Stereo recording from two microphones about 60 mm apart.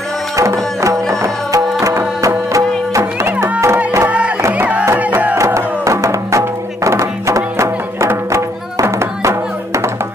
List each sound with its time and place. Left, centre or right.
0.4 s music: right
3.6 s music: right
4.6 s music: right
5.4 s music: right